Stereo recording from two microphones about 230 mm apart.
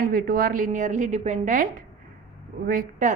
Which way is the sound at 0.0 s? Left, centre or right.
Right.